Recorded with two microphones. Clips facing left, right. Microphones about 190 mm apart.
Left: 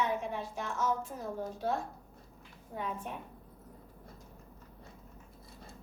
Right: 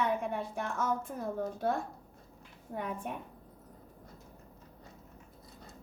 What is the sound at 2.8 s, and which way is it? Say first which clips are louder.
Speech: right 1 dB; 55° right (ahead or behind).